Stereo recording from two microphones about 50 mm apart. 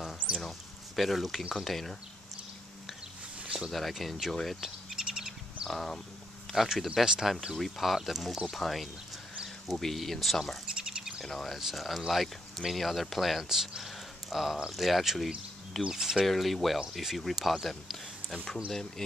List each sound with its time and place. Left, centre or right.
0.4 s speech: centre
3.3 s a sound: right
3.7 s speech: centre
4.6 s bird: centre
5.7 s speech: centre
10.9 s bird: centre
11.2 s speech: centre